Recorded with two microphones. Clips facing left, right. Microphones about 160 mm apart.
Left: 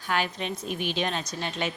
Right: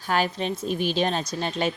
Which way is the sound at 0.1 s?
35° right (ahead or behind).